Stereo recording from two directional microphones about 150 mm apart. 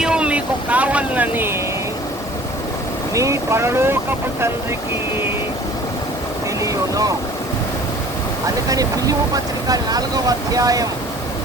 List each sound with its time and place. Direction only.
0.0 s vehicle: 5° right (ahead or behind)
3.2 s speech: 20° right (ahead or behind)
6.6 s boat: 25° right (ahead or behind)
8.7 s speech: 25° right (ahead or behind)